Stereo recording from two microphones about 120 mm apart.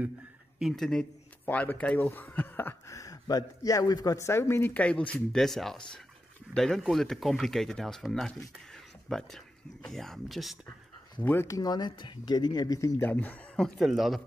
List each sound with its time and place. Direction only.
0.6 s speech: centre (ahead or behind); by 4.7 s 20° left (ahead or behind)
4.7 s speech: 10° left (ahead or behind)
11.1 s speech: 15° left (ahead or behind)
13.0 s speech: 15° left (ahead or behind)
13.7 s speech: centre (ahead or behind)